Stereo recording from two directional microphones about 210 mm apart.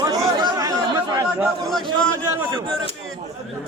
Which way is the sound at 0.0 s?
15° right (ahead or behind).